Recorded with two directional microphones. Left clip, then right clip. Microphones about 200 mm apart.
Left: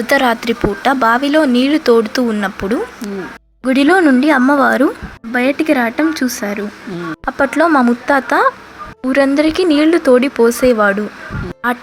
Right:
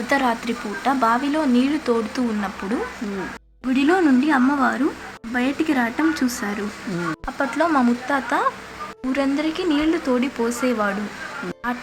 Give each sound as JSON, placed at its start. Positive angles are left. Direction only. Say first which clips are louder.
{"t": 0.1, "sound": "a woman's voice", "louder": "left 8 dB", "side_deg": 25}